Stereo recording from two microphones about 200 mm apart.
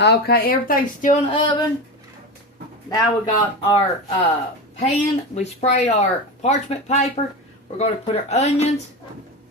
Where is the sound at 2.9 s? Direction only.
20° left (ahead or behind).